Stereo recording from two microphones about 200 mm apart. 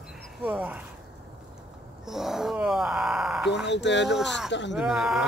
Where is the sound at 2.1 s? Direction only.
Centre (ahead or behind).